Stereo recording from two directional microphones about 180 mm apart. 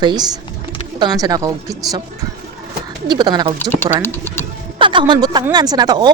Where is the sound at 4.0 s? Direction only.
10° left (ahead or behind).